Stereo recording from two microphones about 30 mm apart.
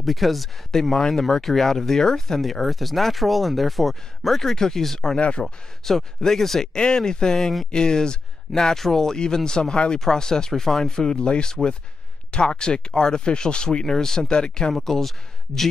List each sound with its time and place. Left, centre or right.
0.0 s speech: centre
0.9 s speech: centre
2.6 s speech: centre
4.6 s speech: centre
5.1 s speech: left
5.4 s speech: centre
6.7 s speech: left
8.7 s speech: centre
11.2 s speech: left
13.8 s speech: centre
14.7 s speech: centre